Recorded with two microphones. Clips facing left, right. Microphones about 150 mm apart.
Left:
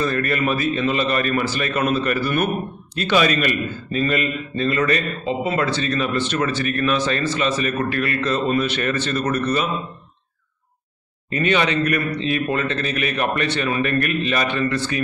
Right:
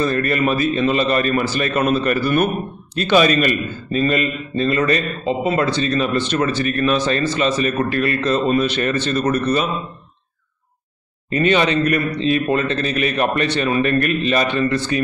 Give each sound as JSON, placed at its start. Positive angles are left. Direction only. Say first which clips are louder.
{"t": 0.0, "sound": "a man's voice", "louder": "right 3 dB", "side_deg": -30}
{"t": 11.2, "sound": "a man's voice", "louder": "right 3 dB", "side_deg": -30}